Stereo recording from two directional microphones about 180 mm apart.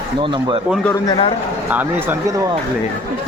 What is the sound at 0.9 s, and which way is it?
Speech, 20° left (ahead or behind).